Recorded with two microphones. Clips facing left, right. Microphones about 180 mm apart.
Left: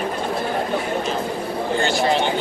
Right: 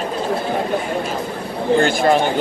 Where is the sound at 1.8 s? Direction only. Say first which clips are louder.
Right 3 dB; 50° right (ahead or behind).